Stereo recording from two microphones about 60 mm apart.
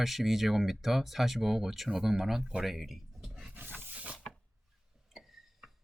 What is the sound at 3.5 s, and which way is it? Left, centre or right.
Roaring cats, right.